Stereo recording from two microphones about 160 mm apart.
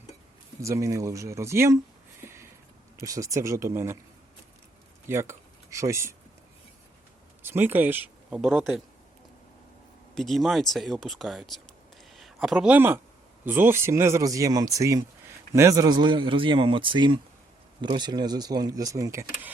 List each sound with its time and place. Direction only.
0.6 s speech: 20° right (ahead or behind)
2.2 s a sound: 15° right (ahead or behind)
3.0 s speech: 20° right (ahead or behind)
5.0 s speech: 15° right (ahead or behind)
7.4 s speech: 15° right (ahead or behind)
8.4 s speech: centre (ahead or behind)
10.2 s a man's voice: centre (ahead or behind); by 19.2 s 20° right (ahead or behind)